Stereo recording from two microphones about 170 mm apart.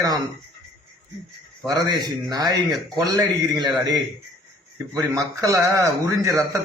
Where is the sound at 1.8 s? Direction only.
25° right (ahead or behind).